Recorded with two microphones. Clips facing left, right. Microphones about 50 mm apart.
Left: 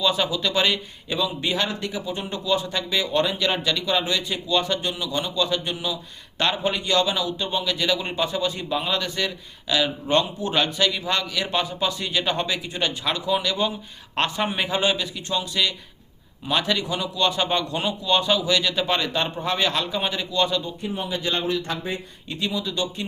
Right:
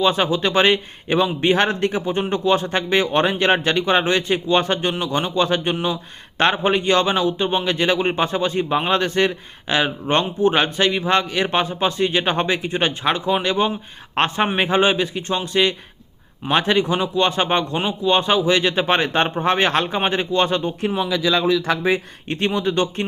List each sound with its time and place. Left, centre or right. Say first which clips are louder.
0.0 s a man's voice: right 5 dB; right
20.8 s speech: right 7 dB; right
22.3 s speech: right 7 dB; right